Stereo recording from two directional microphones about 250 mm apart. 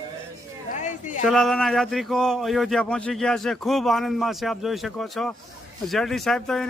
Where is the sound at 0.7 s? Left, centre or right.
Left.